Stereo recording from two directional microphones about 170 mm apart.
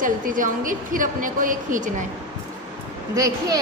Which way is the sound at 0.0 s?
50° right (ahead or behind).